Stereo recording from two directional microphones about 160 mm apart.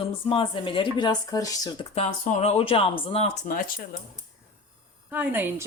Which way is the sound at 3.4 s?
60° left (ahead or behind).